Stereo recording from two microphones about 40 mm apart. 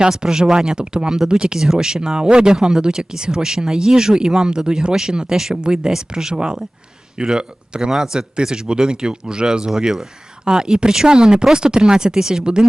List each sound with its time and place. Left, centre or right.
0.0 s speech: centre
9.6 s speech: centre
10.4 s speech: right